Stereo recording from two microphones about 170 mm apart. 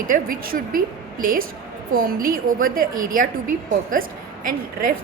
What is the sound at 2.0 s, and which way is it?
A woman's voice, 55° right (ahead or behind).